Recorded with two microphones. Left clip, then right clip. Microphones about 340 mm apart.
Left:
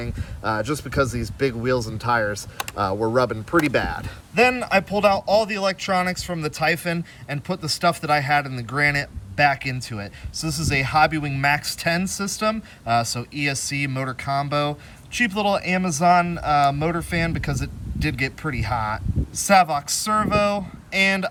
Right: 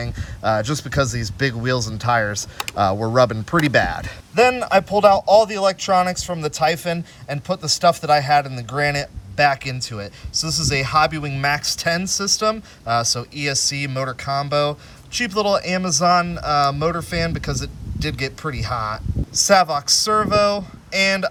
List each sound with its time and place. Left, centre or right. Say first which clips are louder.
0.2 s speech: right 5 dB; right
4.4 s a man's voice: right 3 dB; centre